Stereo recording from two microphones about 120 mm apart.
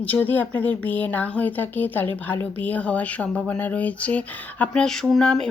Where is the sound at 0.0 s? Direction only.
15° left (ahead or behind).